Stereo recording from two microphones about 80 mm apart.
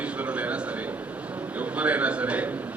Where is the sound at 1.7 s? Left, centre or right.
Centre.